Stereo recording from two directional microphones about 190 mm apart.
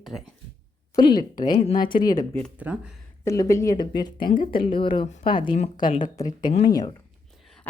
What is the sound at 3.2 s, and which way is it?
A woman's voice, 15° left (ahead or behind).